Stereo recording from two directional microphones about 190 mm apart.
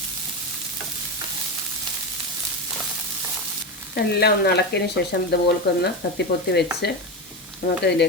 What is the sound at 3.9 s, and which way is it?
Speech, 55° left (ahead or behind).